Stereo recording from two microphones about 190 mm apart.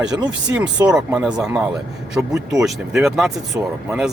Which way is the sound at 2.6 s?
Centre (ahead or behind).